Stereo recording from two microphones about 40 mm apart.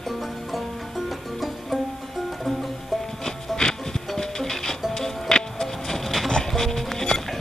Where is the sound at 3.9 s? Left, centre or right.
Centre.